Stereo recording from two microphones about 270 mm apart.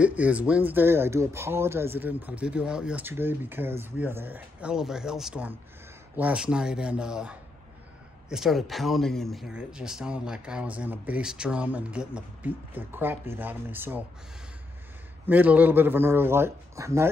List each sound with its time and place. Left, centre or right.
0.0 s speech: centre
15.2 s speech: centre